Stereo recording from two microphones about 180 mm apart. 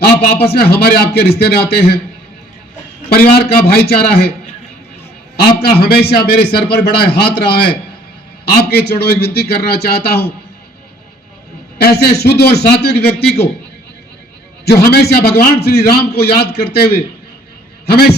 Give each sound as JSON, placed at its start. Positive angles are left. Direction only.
{"t": 0.0, "sound": "a man's voice", "side_deg": 65}
{"t": 3.1, "sound": "a man's voice", "side_deg": 60}
{"t": 5.4, "sound": "a man's voice", "side_deg": 60}
{"t": 11.8, "sound": "a man's voice", "side_deg": 60}
{"t": 14.6, "sound": "a man's voice", "side_deg": 60}